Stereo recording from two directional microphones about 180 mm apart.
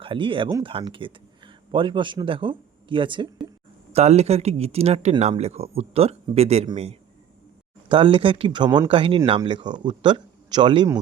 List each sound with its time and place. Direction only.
0.0 s speech: 30° right (ahead or behind)